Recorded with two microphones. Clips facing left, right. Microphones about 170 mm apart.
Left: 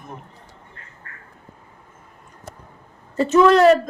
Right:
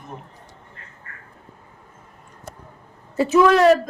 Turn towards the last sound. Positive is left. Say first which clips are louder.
# left 1 dB
turn(degrees=0)  # may be behind; listen again after turning